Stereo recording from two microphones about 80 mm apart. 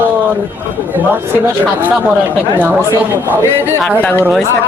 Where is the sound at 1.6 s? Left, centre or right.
Right.